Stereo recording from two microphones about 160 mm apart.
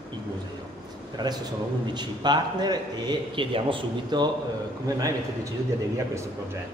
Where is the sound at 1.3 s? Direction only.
25° right (ahead or behind).